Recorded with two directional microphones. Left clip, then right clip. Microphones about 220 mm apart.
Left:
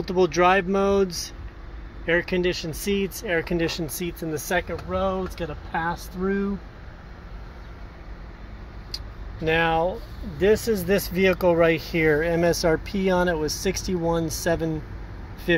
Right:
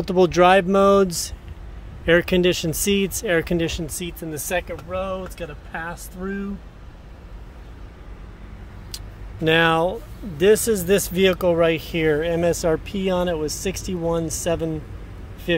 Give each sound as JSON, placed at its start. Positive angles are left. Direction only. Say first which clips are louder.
{"t": 0.0, "sound": "speech", "louder": "right 4 dB", "side_deg": -30}
{"t": 3.5, "sound": "speech", "louder": "right 1 dB", "side_deg": -10}
{"t": 4.9, "sound": "speech", "louder": "left 1 dB", "side_deg": 25}
{"t": 9.4, "sound": "speech", "louder": "right 4 dB", "side_deg": -30}